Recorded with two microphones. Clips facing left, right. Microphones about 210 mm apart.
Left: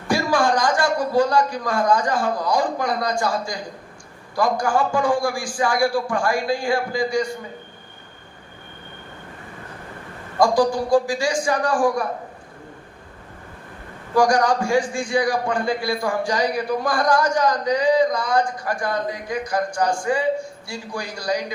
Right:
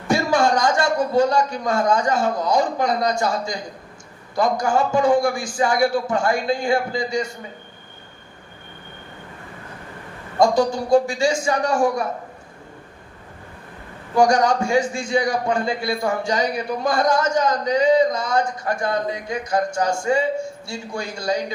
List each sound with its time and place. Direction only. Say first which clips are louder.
0.1 s a man's voice: right 1 dB; 25° right (ahead or behind)
10.3 s a man's voice: even; 25° right (ahead or behind)
14.2 s a man's voice: right 1 dB; 25° right (ahead or behind)